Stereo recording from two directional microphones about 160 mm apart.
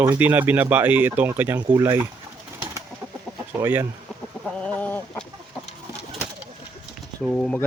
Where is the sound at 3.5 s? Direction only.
15° right (ahead or behind).